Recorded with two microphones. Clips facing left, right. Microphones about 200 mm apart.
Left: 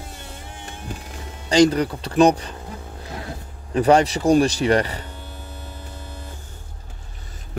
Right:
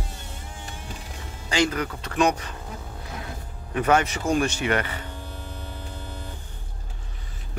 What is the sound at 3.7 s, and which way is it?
Speech, 35° left (ahead or behind).